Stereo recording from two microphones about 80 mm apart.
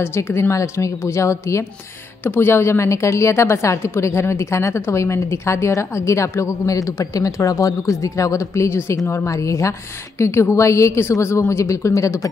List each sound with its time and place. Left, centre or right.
0.0 s a woman's voice: left
2.2 s a woman's voice: left